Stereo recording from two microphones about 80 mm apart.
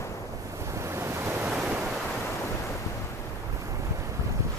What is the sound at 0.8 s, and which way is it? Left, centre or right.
Waves, right.